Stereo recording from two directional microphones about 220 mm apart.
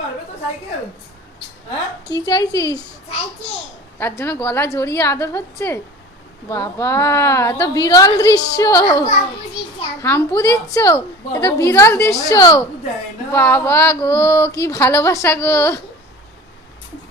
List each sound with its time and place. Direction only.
2.0 s a woman's voice: 15° left (ahead or behind)